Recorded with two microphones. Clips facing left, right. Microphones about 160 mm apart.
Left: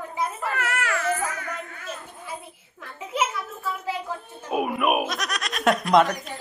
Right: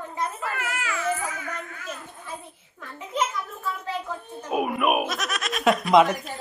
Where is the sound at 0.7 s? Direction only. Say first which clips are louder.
Left 3 dB; 70° left (ahead or behind).